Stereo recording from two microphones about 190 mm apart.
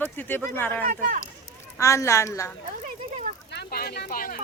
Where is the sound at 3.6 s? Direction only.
55° left (ahead or behind).